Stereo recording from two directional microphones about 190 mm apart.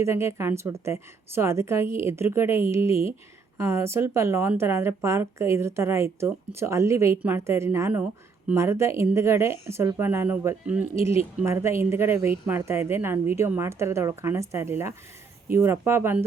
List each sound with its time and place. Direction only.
0.0 s a woman's voice: 15° right (ahead or behind)
2.9 s speech: 30° left (ahead or behind)
3.6 s a woman's voice: 15° right (ahead or behind)